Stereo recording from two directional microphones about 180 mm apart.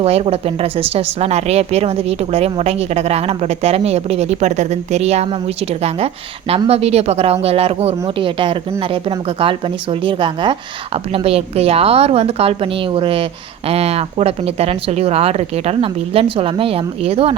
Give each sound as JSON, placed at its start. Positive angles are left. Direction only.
{"t": 0.0, "sound": "a woman's voice", "side_deg": -35}
{"t": 6.5, "sound": "a woman's voice", "side_deg": -35}